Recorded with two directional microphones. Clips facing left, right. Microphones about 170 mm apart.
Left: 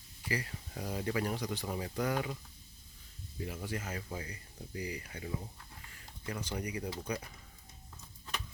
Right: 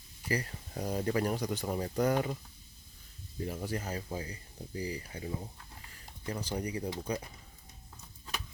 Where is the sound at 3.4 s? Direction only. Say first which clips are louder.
Right 3 dB; 40° right (ahead or behind).